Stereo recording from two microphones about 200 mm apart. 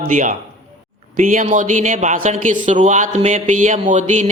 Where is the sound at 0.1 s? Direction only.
40° right (ahead or behind).